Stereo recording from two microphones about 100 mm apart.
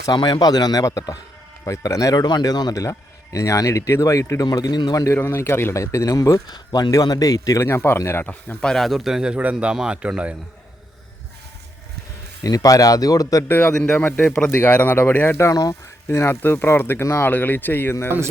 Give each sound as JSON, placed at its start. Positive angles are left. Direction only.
{"t": 0.0, "sound": "a man's voice", "side_deg": 45}
{"t": 5.0, "sound": "speech", "side_deg": 25}
{"t": 8.2, "sound": "a man's voice", "side_deg": 15}
{"t": 8.7, "sound": "a man's voice", "side_deg": 0}
{"t": 12.4, "sound": "speech", "side_deg": 35}
{"t": 13.5, "sound": "a man's voice", "side_deg": 20}